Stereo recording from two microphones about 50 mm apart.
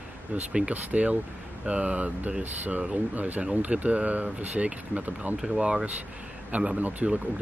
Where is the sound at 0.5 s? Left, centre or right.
Right.